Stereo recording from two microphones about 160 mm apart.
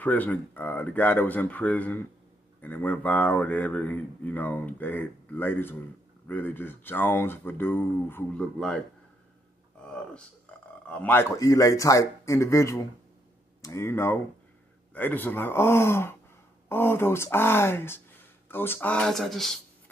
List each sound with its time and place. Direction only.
0.0 s speech: 10° left (ahead or behind)
10.9 s speech: 10° left (ahead or behind)